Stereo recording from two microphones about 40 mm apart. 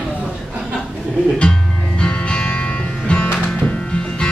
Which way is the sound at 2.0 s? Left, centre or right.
Left.